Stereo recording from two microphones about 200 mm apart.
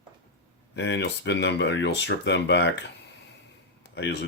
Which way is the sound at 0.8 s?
60° left (ahead or behind).